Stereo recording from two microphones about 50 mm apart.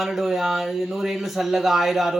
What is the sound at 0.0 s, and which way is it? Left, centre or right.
Speech, centre.